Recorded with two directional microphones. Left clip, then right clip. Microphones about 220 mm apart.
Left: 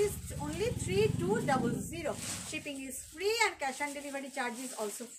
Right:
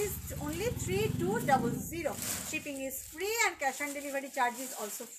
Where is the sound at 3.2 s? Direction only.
15° left (ahead or behind).